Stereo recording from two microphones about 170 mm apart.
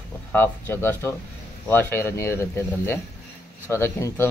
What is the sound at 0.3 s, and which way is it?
Speech, 10° left (ahead or behind).